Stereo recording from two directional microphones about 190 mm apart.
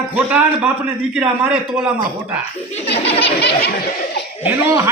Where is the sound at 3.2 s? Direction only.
60° left (ahead or behind).